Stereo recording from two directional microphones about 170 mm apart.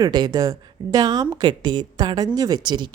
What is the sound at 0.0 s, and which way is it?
A woman's voice, 25° right (ahead or behind).